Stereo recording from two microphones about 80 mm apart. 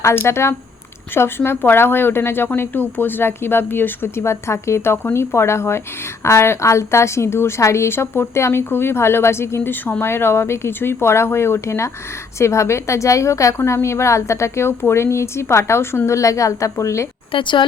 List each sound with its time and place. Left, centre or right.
0.0 s a woman's voice: left
17.3 s speech: left